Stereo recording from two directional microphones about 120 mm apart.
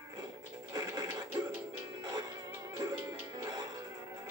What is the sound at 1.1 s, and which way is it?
Music, 25° right (ahead or behind).